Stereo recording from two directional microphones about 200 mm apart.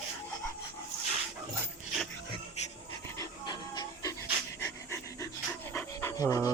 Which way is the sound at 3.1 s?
20° left (ahead or behind).